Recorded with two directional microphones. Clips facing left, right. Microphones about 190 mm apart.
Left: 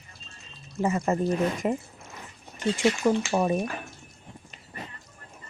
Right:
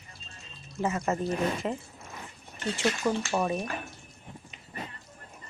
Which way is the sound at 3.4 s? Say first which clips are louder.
Left 5 dB; centre (ahead or behind).